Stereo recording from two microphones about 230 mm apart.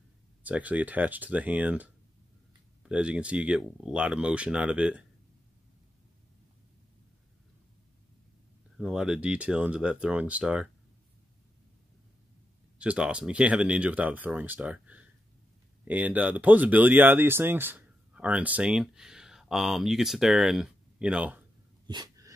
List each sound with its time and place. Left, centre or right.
0.4 s speech: centre
8.7 s speech: centre
12.7 s speech: centre
21.8 s dog: centre